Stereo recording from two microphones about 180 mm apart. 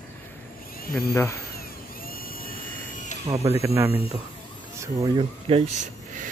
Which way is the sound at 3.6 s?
10° right (ahead or behind).